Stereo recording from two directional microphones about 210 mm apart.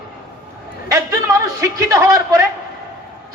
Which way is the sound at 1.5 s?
15° right (ahead or behind).